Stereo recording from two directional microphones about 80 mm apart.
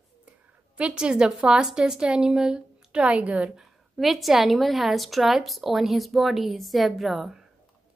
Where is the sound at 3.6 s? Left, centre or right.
Centre.